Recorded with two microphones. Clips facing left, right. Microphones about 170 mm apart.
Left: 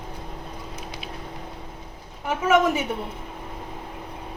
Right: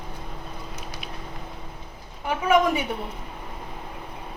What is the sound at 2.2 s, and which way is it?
Speech, 5° left (ahead or behind).